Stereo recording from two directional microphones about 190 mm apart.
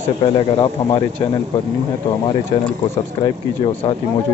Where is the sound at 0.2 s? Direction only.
25° left (ahead or behind).